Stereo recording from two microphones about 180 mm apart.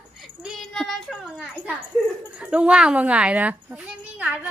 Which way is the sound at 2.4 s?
5° right (ahead or behind).